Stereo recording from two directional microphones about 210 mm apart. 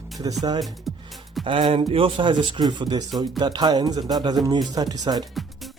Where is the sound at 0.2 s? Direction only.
15° right (ahead or behind).